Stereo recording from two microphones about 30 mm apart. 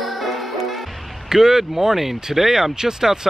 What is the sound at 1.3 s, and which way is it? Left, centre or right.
Speech, centre.